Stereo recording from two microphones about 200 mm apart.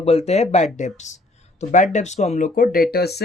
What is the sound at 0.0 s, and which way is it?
Speech, 30° left (ahead or behind).